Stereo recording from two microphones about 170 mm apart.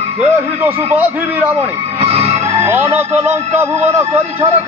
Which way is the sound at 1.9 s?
35° right (ahead or behind).